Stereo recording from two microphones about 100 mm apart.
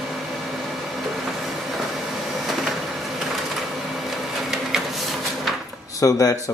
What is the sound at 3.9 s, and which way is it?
Printer, centre (ahead or behind).